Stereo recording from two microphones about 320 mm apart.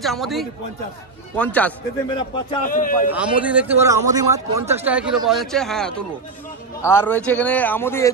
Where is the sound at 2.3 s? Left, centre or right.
Left.